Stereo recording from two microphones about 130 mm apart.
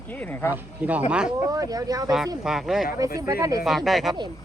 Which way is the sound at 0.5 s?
10° right (ahead or behind).